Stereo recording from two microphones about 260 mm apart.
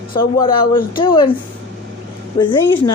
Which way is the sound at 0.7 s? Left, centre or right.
Centre.